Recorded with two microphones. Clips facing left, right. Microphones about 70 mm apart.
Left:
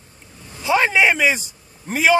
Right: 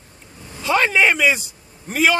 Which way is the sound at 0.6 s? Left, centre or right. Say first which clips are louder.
Even; centre.